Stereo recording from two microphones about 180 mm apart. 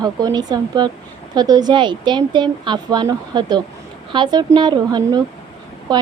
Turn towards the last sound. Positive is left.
turn(degrees=-25)  # may be behind; listen again after turning